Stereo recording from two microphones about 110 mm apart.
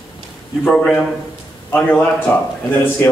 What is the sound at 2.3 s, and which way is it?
Speech, 25° left (ahead or behind).